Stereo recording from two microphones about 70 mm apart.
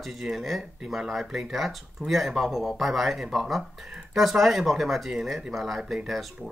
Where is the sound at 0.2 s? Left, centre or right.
Centre.